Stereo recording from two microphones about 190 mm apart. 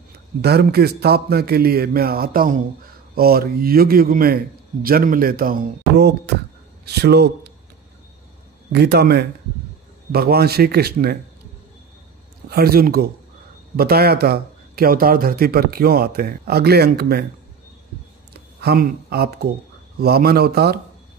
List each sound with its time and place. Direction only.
0.4 s speech: 55° right (ahead or behind)
8.7 s speech: 60° right (ahead or behind)
12.4 s speech: 55° right (ahead or behind)
18.6 s speech: 55° right (ahead or behind)